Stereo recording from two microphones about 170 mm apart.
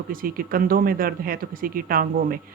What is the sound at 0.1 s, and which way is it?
Speech, 55° right (ahead or behind).